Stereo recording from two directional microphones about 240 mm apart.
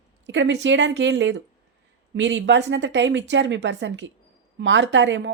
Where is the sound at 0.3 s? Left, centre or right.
Right.